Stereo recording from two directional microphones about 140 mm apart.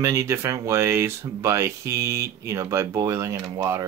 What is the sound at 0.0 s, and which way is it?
Speech, 20° right (ahead or behind).